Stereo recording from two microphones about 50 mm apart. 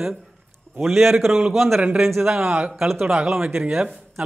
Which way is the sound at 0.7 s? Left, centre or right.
Centre.